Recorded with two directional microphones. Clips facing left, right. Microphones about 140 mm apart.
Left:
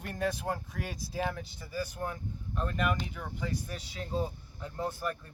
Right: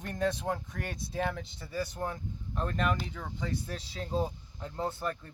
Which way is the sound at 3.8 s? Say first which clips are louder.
Right 2 dB; 35° right (ahead or behind).